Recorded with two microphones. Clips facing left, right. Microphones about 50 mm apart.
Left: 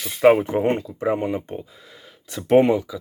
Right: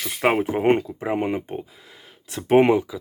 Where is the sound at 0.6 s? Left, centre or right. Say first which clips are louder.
Right 2 dB; right.